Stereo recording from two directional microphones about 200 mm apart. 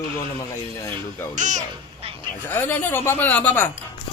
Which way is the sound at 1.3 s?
40° right (ahead or behind).